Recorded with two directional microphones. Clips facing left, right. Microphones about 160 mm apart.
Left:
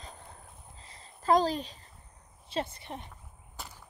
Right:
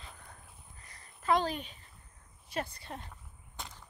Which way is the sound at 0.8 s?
25° left (ahead or behind).